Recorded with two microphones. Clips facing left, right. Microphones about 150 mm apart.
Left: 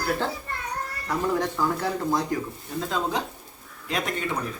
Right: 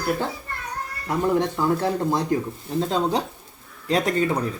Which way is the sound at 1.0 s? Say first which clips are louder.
Right 4 dB; 25° right (ahead or behind).